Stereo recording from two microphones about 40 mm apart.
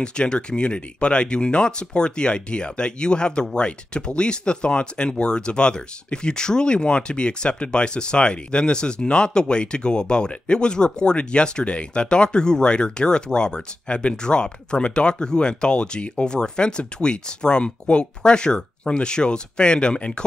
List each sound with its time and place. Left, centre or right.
0.0 s speech: left